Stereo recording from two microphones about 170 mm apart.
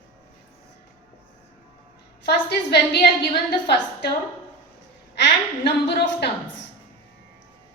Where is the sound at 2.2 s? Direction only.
75° left (ahead or behind).